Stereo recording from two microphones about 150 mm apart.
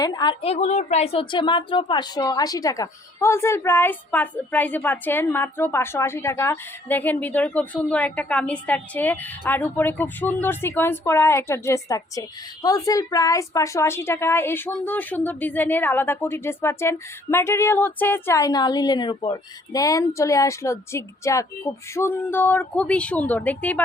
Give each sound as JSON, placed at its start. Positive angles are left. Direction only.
{"t": 0.0, "sound": "a woman's voice", "side_deg": 30}
{"t": 0.4, "sound": "a woman's voice", "side_deg": 45}